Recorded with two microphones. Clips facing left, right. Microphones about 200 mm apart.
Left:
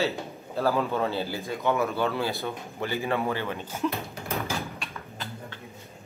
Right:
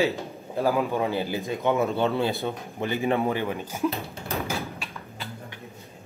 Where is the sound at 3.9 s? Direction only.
30° right (ahead or behind).